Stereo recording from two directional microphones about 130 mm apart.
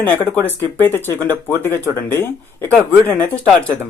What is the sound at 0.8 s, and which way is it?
Speech, 15° left (ahead or behind).